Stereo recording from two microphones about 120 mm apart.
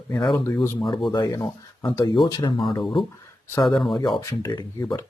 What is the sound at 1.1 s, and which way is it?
Speech, 35° left (ahead or behind).